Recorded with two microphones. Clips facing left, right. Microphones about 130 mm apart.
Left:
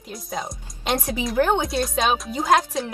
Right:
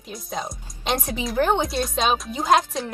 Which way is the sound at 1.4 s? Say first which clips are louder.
Even; 15° right (ahead or behind).